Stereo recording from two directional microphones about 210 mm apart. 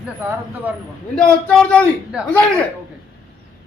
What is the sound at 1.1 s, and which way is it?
A man's voice, 5° left (ahead or behind).